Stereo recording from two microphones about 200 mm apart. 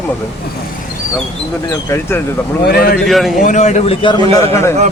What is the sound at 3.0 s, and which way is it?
Speech, centre (ahead or behind).